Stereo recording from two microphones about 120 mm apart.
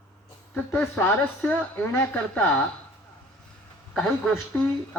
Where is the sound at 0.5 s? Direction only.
10° left (ahead or behind).